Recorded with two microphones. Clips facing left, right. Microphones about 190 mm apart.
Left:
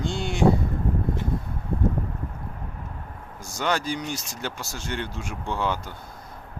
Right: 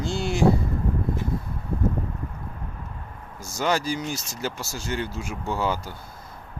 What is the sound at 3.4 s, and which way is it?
Speech, 5° right (ahead or behind).